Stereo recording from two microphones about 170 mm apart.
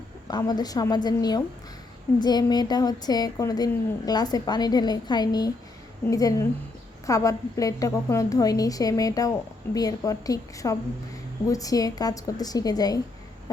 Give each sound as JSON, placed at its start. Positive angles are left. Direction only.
{"t": 0.3, "sound": "a woman's voice", "side_deg": 25}